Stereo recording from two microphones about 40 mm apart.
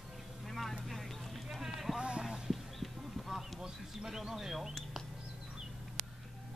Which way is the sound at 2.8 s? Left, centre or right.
Centre.